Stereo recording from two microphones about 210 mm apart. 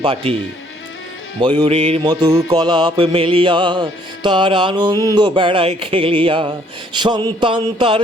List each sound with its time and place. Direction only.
0.0 s music: 25° right (ahead or behind)
1.4 s music: 20° right (ahead or behind)